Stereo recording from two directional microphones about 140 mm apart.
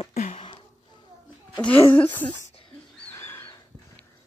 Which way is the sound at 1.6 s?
15° left (ahead or behind).